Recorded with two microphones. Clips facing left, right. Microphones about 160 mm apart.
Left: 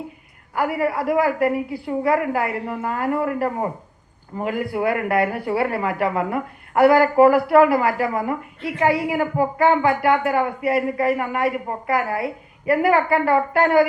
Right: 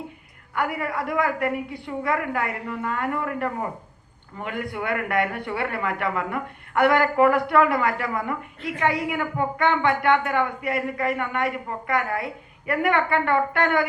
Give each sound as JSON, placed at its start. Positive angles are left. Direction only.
{"t": 0.5, "sound": "a woman's voice", "side_deg": 30}